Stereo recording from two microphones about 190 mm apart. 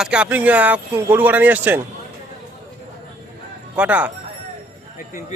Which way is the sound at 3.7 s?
10° right (ahead or behind).